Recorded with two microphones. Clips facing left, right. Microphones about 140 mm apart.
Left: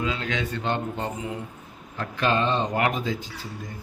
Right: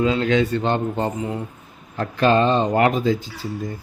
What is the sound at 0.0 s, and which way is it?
Speech, 35° right (ahead or behind).